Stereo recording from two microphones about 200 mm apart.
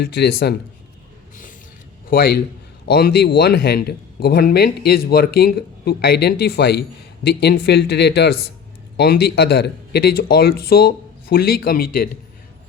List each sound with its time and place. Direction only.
0.0 s speech: 55° left (ahead or behind)
2.0 s speech: 50° left (ahead or behind)